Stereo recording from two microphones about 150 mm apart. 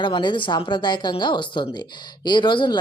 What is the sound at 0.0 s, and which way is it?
Speech, 30° left (ahead or behind).